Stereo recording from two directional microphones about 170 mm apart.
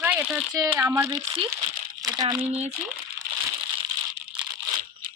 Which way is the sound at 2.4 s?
40° right (ahead or behind).